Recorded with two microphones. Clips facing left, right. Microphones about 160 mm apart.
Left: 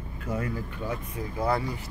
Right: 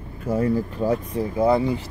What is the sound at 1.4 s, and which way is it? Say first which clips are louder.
Speech: right 8 dB; 20° right (ahead or behind).